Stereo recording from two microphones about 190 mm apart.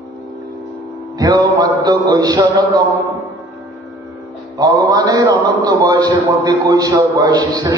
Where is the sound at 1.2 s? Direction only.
20° right (ahead or behind).